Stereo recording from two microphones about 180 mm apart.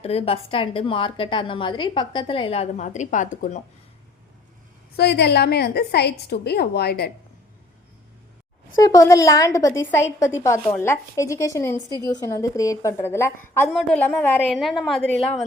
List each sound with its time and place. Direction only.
0.0 s a woman's voice: 35° left (ahead or behind)
4.9 s a woman's voice: 65° left (ahead or behind)
8.8 s a woman's voice: 20° left (ahead or behind)